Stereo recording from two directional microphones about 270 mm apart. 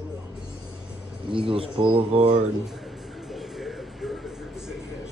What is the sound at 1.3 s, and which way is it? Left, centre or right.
Speech, centre.